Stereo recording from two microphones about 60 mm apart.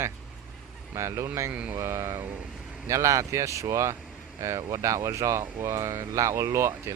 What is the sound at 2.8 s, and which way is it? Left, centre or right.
Speech, right.